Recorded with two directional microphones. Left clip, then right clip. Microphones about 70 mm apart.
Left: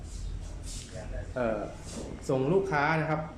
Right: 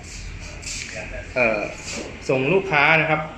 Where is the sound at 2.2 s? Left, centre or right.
Centre.